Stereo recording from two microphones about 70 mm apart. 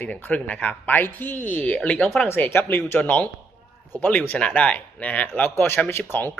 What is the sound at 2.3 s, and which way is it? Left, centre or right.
Speech, left.